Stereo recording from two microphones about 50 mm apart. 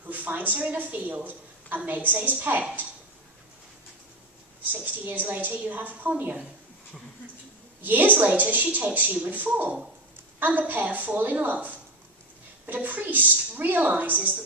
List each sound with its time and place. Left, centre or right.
0.0 s a woman's voice: right
4.7 s a woman's voice: right
7.8 s a woman's voice: right